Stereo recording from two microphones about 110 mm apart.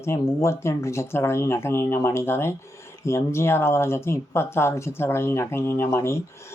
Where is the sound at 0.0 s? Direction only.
25° left (ahead or behind).